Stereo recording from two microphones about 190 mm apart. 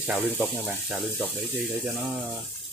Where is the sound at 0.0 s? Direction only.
5° right (ahead or behind).